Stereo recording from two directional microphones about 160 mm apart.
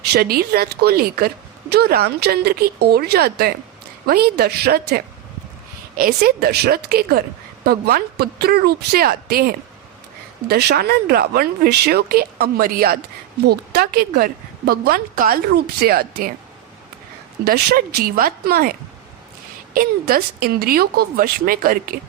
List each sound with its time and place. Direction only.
0.1 s a woman's voice: 70° right (ahead or behind)
6.0 s a woman's voice: 70° right (ahead or behind)
10.5 s a woman's voice: 85° right
17.4 s a woman's voice: 80° right; by 21.9 s 65° right (ahead or behind)